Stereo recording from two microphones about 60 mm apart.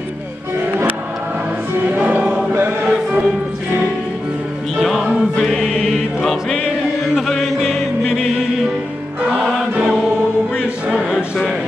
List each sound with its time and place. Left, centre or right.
1.9 s music: right
2.8 s music: centre
4.7 s music: centre
5.7 s music: centre
10.5 s choir: centre